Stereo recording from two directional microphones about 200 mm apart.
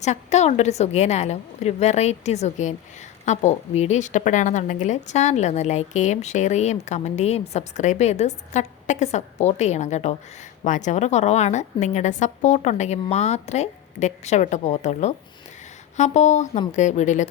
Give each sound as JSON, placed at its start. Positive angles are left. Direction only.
{"t": 0.0, "sound": "a woman's voice", "side_deg": 35}